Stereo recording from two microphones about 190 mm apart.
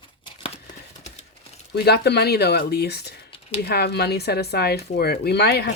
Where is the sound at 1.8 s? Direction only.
60° left (ahead or behind).